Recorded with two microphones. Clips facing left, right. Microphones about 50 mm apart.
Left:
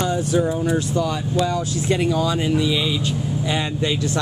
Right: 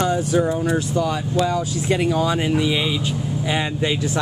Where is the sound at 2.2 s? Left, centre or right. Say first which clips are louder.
Right 1 dB; right.